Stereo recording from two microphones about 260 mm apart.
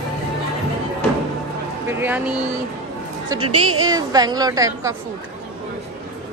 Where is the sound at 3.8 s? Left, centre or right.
Centre.